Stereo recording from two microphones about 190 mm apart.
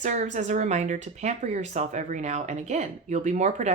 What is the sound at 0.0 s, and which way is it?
Speech, 40° right (ahead or behind).